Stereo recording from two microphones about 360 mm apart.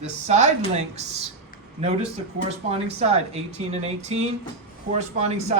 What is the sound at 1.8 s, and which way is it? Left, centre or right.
Speech, centre.